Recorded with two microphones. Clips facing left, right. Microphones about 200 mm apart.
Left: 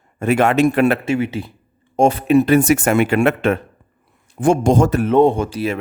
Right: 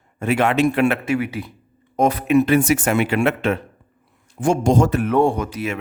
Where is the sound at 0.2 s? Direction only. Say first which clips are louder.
Left 3 dB; 45° left (ahead or behind).